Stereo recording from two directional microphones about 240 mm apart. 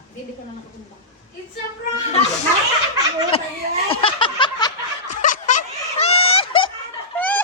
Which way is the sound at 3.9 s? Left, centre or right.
Left.